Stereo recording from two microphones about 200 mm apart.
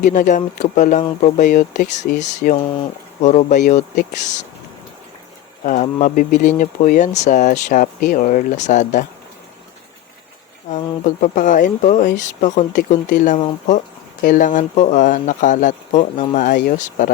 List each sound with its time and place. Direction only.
0.0 s speech: 40° left (ahead or behind)
5.6 s speech: 40° left (ahead or behind)
10.7 s speech: 40° left (ahead or behind)